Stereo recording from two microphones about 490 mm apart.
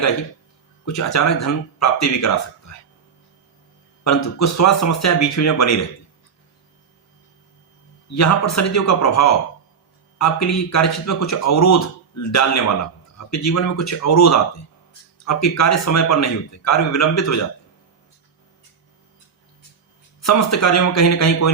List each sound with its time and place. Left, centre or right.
0.9 s a man's voice: left
4.0 s a man's voice: left
8.1 s a man's voice: left
20.2 s a man's voice: left